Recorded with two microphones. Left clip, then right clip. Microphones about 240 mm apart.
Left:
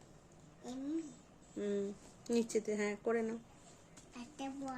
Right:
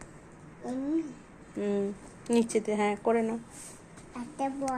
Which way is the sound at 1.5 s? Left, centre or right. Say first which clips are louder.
Right 8 dB; left.